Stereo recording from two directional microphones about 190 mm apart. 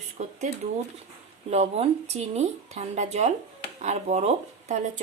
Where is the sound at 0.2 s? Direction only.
35° right (ahead or behind).